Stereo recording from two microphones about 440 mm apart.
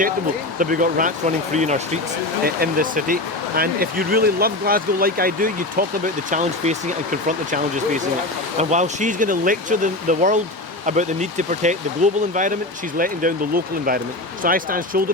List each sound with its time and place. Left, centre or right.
0.6 s speech: centre